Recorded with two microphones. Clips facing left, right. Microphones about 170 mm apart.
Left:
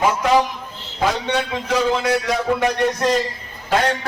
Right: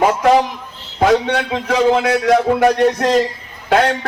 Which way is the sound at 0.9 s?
55° right (ahead or behind).